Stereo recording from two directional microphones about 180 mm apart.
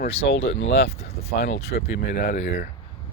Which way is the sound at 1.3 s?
65° left (ahead or behind).